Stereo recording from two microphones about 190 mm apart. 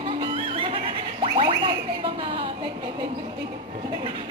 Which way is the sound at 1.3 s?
25° right (ahead or behind).